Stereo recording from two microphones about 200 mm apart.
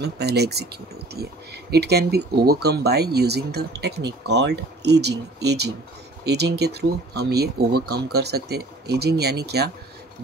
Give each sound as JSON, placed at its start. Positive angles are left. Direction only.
{"t": 0.0, "sound": "speech", "side_deg": -55}